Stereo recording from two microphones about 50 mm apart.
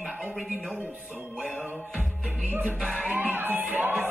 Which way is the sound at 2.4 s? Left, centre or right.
Right.